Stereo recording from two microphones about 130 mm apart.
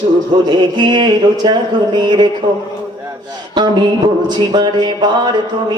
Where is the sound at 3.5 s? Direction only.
35° right (ahead or behind).